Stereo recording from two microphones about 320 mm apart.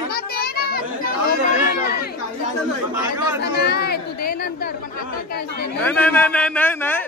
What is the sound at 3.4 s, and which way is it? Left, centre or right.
Chatter, left.